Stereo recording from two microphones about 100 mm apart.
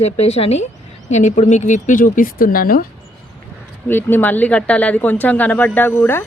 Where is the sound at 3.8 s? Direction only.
20° left (ahead or behind).